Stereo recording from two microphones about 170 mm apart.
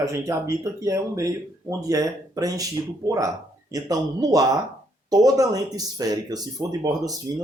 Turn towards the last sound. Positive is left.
turn(degrees=-20)  # may be behind; listen again after turning